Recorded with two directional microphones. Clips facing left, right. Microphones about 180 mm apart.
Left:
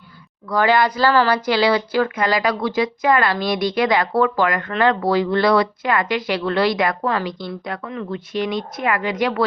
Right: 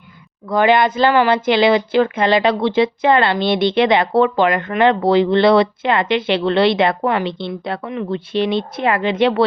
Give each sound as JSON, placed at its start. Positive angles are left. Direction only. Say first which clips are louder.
{"t": 0.4, "sound": "speech", "louder": "right 3 dB", "side_deg": -20}